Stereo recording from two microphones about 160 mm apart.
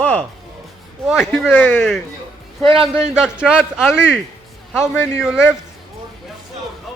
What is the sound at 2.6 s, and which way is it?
Speech, 35° right (ahead or behind).